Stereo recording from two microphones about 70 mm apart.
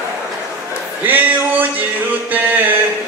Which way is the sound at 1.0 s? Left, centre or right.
Right.